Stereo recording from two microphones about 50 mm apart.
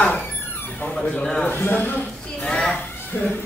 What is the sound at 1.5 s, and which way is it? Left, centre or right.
Speech, left.